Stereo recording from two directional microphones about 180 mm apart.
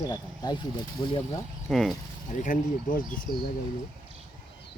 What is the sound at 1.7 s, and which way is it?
Speech, centre (ahead or behind).